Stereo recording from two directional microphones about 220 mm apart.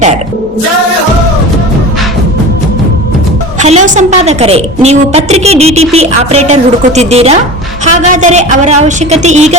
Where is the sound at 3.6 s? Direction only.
30° right (ahead or behind).